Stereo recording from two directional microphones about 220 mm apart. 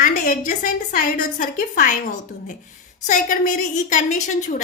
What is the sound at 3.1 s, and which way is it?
A woman's voice, 35° left (ahead or behind).